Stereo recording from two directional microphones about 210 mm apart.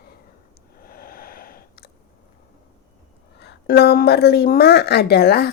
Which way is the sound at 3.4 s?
50° left (ahead or behind).